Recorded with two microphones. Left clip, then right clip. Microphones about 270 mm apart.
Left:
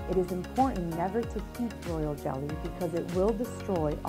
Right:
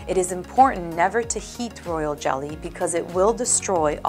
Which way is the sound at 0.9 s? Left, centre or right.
Centre.